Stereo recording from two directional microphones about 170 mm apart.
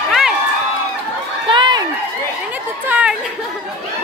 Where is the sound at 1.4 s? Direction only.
25° right (ahead or behind).